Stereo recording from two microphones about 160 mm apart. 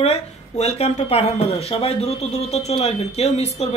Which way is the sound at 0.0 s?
40° left (ahead or behind).